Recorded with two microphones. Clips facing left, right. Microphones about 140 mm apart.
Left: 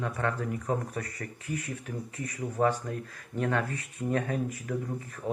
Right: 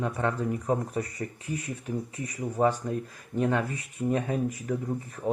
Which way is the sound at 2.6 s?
20° right (ahead or behind).